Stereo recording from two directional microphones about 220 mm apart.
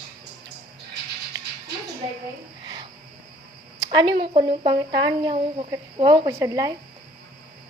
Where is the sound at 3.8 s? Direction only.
20° right (ahead or behind).